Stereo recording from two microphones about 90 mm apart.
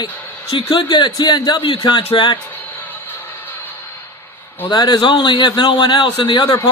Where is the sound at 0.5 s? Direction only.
65° left (ahead or behind).